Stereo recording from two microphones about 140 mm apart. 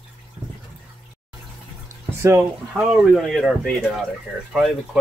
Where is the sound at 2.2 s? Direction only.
20° right (ahead or behind).